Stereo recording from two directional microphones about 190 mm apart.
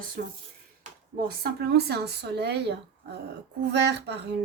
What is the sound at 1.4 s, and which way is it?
Speech, 55° right (ahead or behind).